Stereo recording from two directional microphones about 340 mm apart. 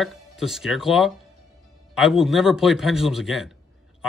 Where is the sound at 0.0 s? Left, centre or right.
Centre.